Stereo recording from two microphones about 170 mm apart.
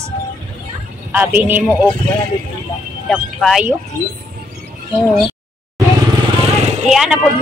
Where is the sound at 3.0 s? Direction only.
Centre (ahead or behind).